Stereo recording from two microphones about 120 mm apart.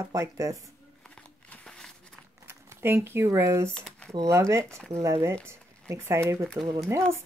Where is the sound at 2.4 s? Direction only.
20° right (ahead or behind).